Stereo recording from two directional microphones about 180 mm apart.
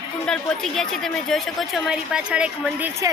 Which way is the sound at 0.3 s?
5° left (ahead or behind).